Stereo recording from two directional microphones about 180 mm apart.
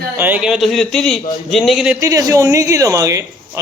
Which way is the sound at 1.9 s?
20° right (ahead or behind).